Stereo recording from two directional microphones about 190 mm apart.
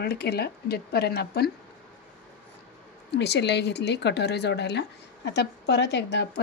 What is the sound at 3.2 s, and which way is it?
Speech, 60° left (ahead or behind).